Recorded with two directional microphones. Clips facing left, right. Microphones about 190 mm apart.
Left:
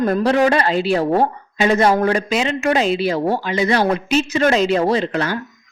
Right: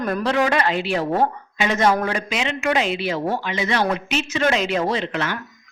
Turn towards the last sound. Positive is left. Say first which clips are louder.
# left 5 dB
turn(degrees=35)  # may be behind; listen again after turning